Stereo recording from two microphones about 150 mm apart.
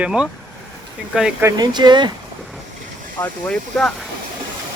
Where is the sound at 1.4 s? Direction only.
30° right (ahead or behind).